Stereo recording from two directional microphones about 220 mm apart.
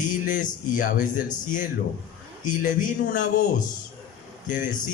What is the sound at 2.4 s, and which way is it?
A man's voice, 35° left (ahead or behind).